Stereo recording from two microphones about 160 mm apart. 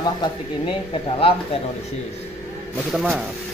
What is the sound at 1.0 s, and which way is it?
Speech, 35° left (ahead or behind).